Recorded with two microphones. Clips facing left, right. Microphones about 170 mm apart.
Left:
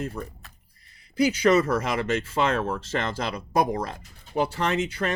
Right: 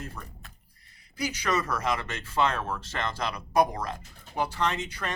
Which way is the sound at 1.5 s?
25° left (ahead or behind).